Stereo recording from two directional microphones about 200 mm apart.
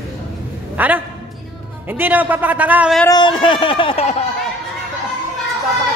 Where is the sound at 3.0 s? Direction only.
25° left (ahead or behind).